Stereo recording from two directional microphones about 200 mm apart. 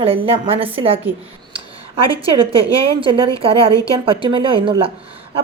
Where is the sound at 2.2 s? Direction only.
25° right (ahead or behind).